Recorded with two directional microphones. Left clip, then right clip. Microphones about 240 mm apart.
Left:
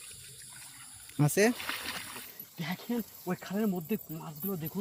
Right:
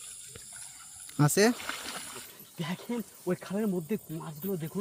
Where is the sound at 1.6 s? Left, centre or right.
Centre.